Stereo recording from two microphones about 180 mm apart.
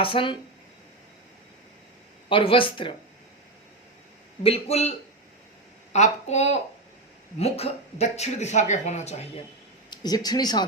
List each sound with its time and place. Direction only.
0.0 s speech: 30° left (ahead or behind)
2.3 s speech: 30° left (ahead or behind)
4.4 s speech: 35° left (ahead or behind)
9.9 s speech: 20° left (ahead or behind)